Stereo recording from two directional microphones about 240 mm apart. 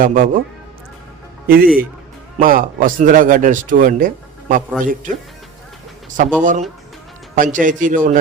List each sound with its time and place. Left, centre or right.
0.0 s a man's voice: right
1.5 s a man's voice: right
6.4 s a man's voice: right